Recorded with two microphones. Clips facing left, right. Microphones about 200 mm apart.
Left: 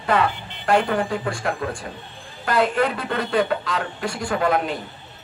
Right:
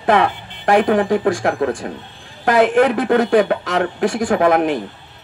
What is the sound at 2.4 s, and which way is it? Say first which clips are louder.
Speech: right 7 dB; 75° right (ahead or behind).